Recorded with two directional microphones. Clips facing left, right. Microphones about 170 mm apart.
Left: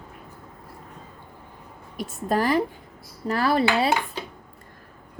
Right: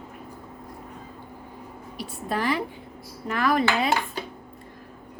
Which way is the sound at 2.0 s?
45° left (ahead or behind).